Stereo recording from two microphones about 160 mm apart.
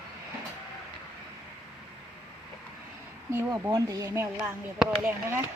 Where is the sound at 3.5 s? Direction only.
25° right (ahead or behind).